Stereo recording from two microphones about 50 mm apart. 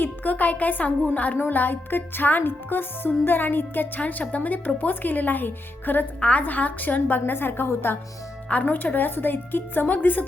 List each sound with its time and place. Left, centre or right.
0.0 s a woman's voice: left
1.5 s music: left
3.2 s a woman's voice: left
6.1 s a woman's voice: left
8.6 s music: left
9.9 s a woman's voice: left